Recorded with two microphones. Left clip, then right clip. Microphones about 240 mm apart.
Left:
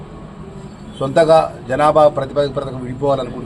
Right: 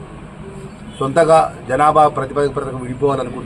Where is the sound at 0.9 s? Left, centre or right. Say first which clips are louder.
Even; centre.